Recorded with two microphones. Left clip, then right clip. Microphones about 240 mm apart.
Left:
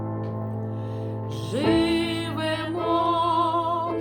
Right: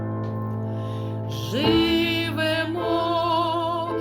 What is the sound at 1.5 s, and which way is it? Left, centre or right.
Music, centre.